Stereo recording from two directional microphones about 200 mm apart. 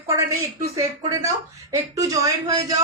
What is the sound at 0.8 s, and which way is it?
Speech, 15° right (ahead or behind).